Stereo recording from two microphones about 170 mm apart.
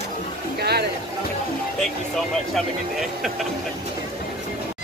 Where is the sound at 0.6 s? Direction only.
70° right (ahead or behind).